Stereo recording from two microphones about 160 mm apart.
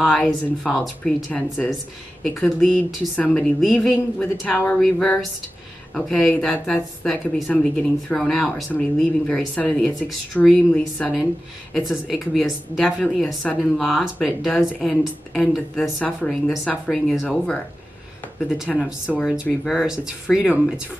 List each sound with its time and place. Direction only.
0.0 s a woman's voice: centre (ahead or behind)